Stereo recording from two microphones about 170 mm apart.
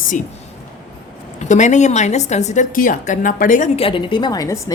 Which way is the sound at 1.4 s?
45° left (ahead or behind).